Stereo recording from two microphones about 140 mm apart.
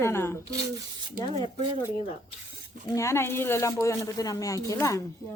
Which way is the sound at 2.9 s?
20° left (ahead or behind).